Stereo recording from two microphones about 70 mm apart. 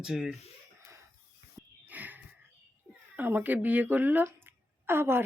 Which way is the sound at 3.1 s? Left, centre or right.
Right.